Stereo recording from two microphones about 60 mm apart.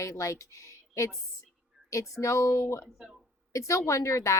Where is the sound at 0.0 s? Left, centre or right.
Left.